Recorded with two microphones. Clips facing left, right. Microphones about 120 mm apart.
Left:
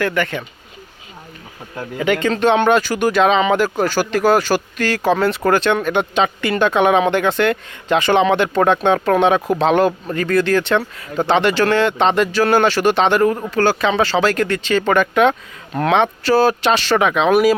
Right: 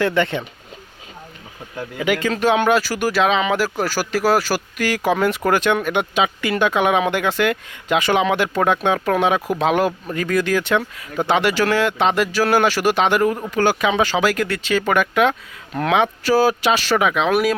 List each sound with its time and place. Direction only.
0.0 s speech: 25° right (ahead or behind)
2.0 s speech: 5° right (ahead or behind)